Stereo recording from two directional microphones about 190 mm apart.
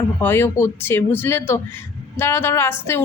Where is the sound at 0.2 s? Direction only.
10° left (ahead or behind).